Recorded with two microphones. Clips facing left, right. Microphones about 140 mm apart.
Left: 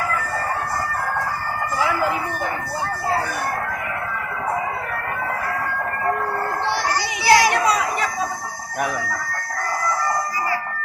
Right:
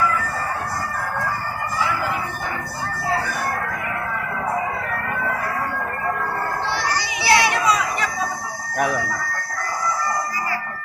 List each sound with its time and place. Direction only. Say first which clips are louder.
6.9 s children playing: left 3 dB; 45° left (ahead or behind)